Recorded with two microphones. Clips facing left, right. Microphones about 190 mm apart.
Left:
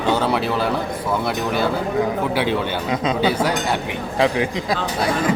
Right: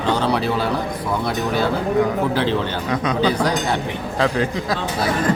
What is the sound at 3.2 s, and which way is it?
A man's voice, 5° left (ahead or behind).